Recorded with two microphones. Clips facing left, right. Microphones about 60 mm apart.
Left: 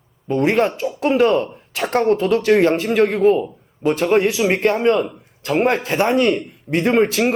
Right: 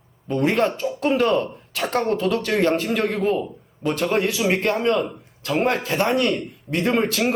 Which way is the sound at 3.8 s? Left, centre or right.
Centre.